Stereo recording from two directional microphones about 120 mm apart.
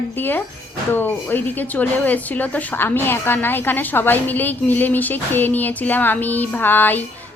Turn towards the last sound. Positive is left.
turn(degrees=15)  # may be behind; listen again after turning